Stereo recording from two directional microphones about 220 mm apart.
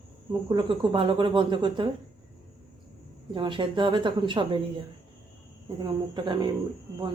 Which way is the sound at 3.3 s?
20° right (ahead or behind).